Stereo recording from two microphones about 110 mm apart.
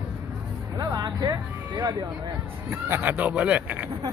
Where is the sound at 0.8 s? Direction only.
35° right (ahead or behind).